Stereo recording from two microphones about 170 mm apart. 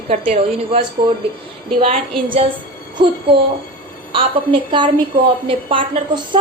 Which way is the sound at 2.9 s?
30° right (ahead or behind).